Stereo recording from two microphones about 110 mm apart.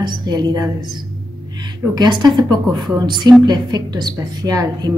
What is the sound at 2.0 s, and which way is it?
A woman's voice, 40° right (ahead or behind).